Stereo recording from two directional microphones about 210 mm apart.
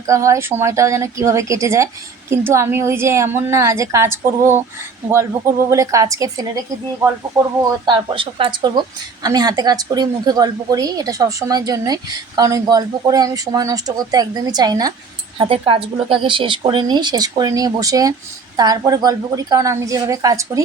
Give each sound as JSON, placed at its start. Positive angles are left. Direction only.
{"t": 0.1, "sound": "a woman's voice", "side_deg": -15}
{"t": 5.6, "sound": "a woman's voice", "side_deg": -15}
{"t": 7.9, "sound": "a woman's voice", "side_deg": -25}